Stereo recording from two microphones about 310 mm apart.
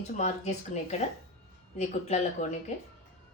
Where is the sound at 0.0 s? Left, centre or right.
Left.